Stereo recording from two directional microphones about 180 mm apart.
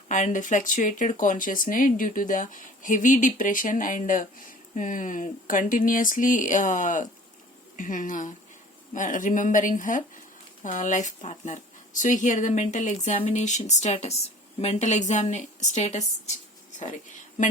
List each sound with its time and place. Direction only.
0.1 s speech: 45° left (ahead or behind)